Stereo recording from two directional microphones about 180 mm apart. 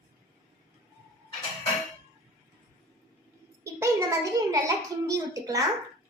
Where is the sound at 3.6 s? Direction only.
15° right (ahead or behind).